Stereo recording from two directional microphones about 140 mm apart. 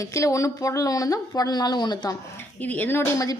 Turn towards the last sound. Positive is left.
turn(degrees=20)  # may be behind; listen again after turning